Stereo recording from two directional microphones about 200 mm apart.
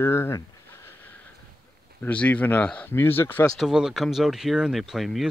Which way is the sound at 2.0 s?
5° left (ahead or behind).